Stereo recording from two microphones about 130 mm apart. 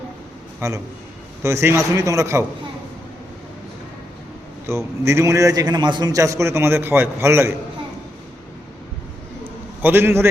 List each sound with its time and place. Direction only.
1.4 s a man's voice: 20° right (ahead or behind)
4.6 s a man's voice: 20° right (ahead or behind)
9.8 s a man's voice: 15° right (ahead or behind)